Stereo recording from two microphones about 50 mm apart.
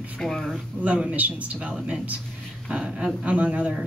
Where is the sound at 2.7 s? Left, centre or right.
Right.